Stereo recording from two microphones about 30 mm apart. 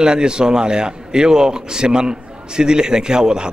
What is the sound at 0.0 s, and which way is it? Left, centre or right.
A man's voice, right.